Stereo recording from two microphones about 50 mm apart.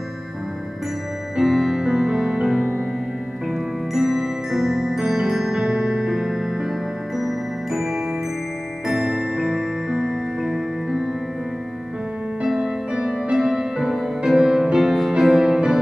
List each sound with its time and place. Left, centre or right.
1.3 s music: centre
3.9 s music: centre
12.4 s music: centre